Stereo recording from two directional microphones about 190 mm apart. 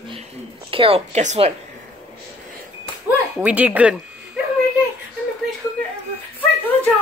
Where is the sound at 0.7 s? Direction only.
30° right (ahead or behind).